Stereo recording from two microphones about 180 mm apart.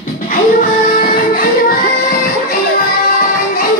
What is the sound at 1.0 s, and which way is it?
Music, 55° left (ahead or behind).